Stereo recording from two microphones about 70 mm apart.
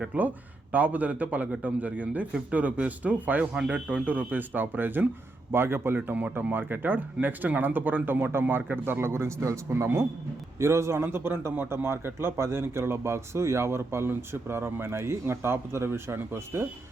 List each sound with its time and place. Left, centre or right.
0.0 s a man's voice: right
3.4 s a man's voice: centre; by 16.6 s right